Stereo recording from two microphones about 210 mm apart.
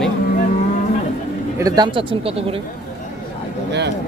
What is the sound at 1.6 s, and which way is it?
Speech, 20° right (ahead or behind).